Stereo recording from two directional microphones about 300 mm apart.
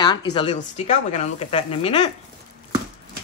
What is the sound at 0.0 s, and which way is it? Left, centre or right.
Speech, centre.